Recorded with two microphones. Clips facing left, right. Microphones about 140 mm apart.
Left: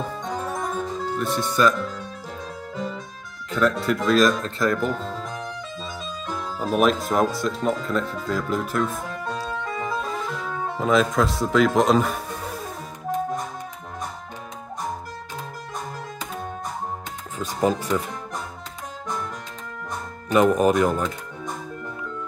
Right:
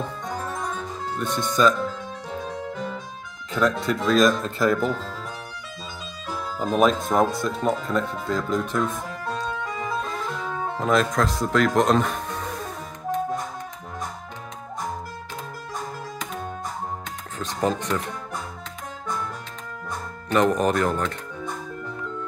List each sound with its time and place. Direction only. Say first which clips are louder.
0.5 s music: left 3 dB; 10° left (ahead or behind)
3.5 s speech: left 1 dB; centre (ahead or behind)
6.6 s speech: even; 5° left (ahead or behind)
9.9 s music: left 1 dB; centre (ahead or behind)
17.4 s speech: left 2 dB; 10° left (ahead or behind)
20.2 s speech: left 3 dB; 10° left (ahead or behind)